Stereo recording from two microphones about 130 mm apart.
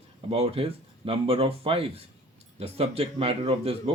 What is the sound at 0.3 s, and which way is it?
Speech, 50° right (ahead or behind).